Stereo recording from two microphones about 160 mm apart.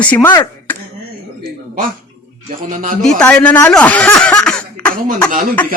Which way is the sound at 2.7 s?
55° right (ahead or behind).